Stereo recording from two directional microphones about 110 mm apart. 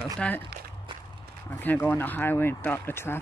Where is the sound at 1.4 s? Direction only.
15° left (ahead or behind).